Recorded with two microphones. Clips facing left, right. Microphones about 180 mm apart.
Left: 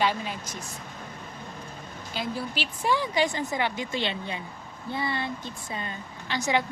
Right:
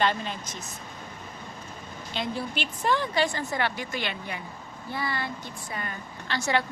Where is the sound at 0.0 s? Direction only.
10° left (ahead or behind).